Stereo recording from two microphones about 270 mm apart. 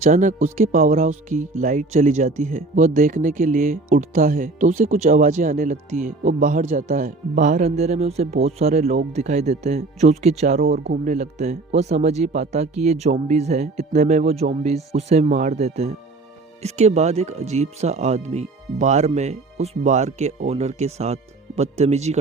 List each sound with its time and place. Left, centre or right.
0.0 s speech: right